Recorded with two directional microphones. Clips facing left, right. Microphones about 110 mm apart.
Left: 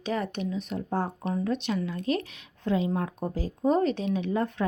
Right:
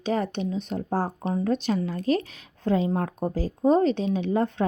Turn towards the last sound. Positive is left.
turn(degrees=-30)  # may be behind; listen again after turning